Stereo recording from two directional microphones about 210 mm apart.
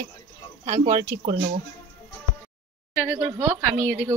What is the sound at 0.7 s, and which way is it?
Speech, 40° right (ahead or behind).